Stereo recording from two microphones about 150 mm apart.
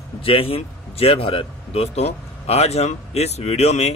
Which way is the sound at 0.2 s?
40° left (ahead or behind).